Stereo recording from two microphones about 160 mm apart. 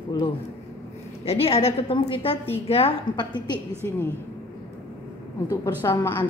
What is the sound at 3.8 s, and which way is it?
Speech, 15° left (ahead or behind).